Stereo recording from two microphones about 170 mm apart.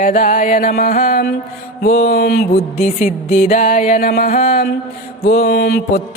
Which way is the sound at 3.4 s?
55° left (ahead or behind).